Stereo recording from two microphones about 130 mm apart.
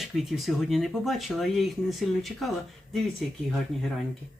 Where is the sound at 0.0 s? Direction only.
Centre (ahead or behind).